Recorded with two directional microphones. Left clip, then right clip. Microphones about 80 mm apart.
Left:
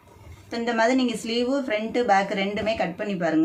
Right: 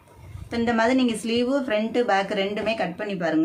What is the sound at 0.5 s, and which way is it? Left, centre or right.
A woman's voice, right.